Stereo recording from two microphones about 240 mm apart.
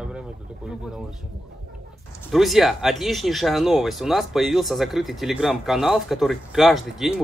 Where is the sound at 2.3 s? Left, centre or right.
Centre.